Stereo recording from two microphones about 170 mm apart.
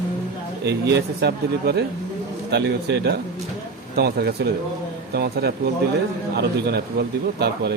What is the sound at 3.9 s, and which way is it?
Speech, 70° right (ahead or behind).